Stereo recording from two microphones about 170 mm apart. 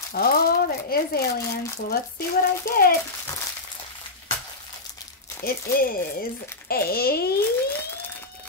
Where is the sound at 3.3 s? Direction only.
20° left (ahead or behind).